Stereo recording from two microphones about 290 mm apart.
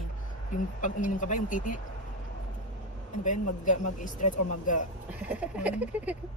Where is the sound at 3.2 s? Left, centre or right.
Left.